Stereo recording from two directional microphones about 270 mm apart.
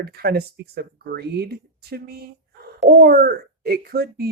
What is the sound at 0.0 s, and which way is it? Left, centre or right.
Speech, right.